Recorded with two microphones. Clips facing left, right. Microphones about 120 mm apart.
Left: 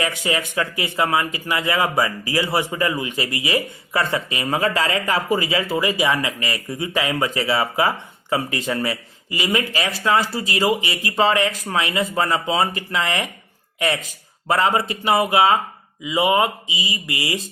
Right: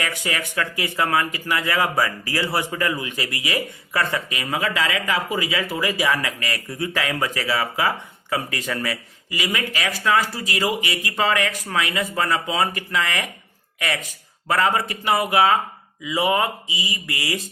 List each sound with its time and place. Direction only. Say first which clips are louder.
0.0 s speech: left 4 dB; 20° left (ahead or behind)